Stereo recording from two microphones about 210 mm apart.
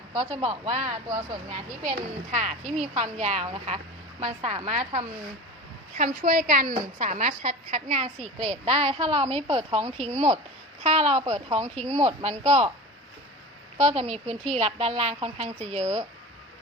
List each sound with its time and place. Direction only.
0.1 s a woman's voice: 30° right (ahead or behind)
13.7 s a woman's voice: 30° right (ahead or behind)